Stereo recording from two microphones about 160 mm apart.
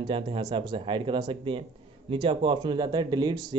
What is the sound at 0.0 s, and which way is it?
Speech, 30° right (ahead or behind).